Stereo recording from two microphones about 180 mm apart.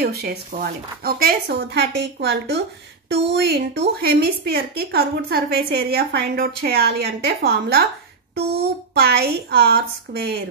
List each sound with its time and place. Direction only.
0.0 s a woman's voice: 60° right (ahead or behind)
8.9 s a woman's voice: 65° right (ahead or behind)